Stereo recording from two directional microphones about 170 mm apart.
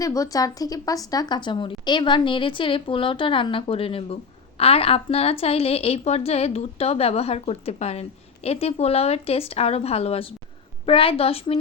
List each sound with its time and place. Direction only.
0.0 s a woman's voice: 20° left (ahead or behind)